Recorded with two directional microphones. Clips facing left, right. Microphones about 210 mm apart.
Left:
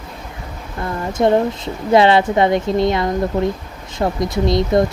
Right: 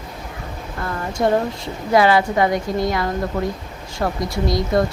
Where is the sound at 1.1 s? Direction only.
20° left (ahead or behind).